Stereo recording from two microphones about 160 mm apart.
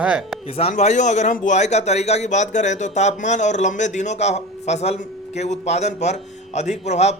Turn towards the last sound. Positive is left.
turn(degrees=45)  # may be behind; listen again after turning